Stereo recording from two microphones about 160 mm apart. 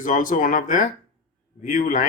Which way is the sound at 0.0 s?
55° left (ahead or behind).